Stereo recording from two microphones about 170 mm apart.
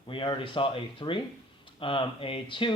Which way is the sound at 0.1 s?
30° left (ahead or behind).